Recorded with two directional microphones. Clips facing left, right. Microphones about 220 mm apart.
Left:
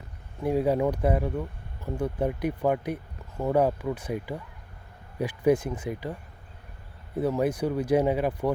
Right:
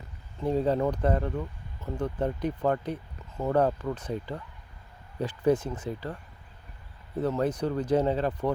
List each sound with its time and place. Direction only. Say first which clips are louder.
0.3 s speech: left 1 dB; 10° left (ahead or behind)
7.2 s speech: left 2 dB; 10° left (ahead or behind)